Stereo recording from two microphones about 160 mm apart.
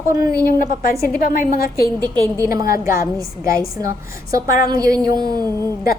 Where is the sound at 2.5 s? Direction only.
20° right (ahead or behind).